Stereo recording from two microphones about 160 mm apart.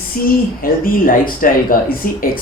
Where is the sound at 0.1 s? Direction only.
60° left (ahead or behind).